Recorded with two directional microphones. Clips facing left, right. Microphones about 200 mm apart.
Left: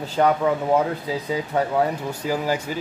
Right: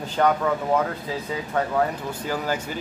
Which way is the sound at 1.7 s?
10° left (ahead or behind).